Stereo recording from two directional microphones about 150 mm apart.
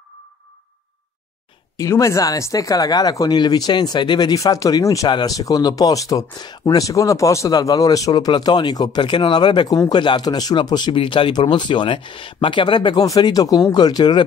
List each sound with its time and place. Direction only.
1.8 s speech: 20° left (ahead or behind)